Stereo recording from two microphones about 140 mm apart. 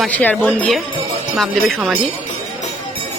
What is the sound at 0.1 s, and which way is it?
Speech, 10° left (ahead or behind).